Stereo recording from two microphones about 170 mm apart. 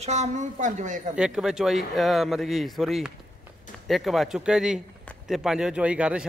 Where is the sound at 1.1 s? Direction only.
5° right (ahead or behind).